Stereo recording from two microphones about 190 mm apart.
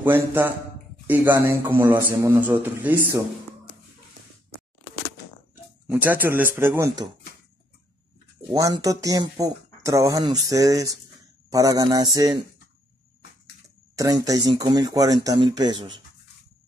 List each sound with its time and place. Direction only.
0.0 s speech: 10° right (ahead or behind)
5.9 s speech: 10° right (ahead or behind)
8.5 s speech: 15° right (ahead or behind)
13.9 s speech: 20° right (ahead or behind)